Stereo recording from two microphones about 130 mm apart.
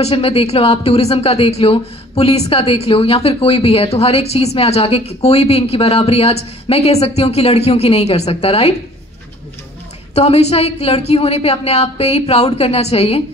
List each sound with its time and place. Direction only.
0.0 s speech: 50° left (ahead or behind)
10.1 s speech: 55° left (ahead or behind)